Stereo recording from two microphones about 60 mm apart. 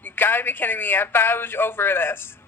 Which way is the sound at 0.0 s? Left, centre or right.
Left.